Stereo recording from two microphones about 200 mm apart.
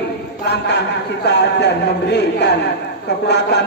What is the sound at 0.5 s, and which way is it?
A man's voice, 60° left (ahead or behind).